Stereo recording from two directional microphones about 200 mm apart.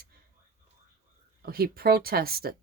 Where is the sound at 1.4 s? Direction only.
50° right (ahead or behind).